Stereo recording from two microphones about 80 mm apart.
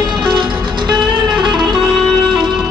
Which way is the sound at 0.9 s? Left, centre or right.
Centre.